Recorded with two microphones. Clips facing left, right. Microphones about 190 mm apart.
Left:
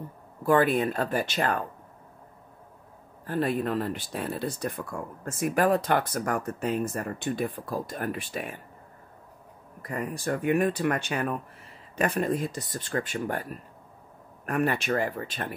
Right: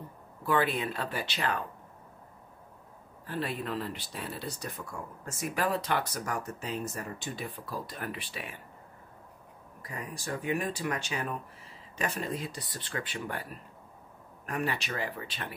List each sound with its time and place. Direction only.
0.5 s speech: 50° left (ahead or behind)
3.3 s speech: 45° left (ahead or behind)
9.8 s speech: 55° left (ahead or behind)